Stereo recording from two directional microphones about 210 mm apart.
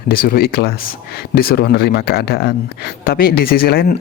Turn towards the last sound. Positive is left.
turn(degrees=45)  # may be behind; listen again after turning